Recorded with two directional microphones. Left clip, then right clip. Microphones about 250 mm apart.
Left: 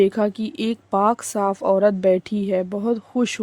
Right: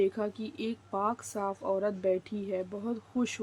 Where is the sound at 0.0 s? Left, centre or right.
Left.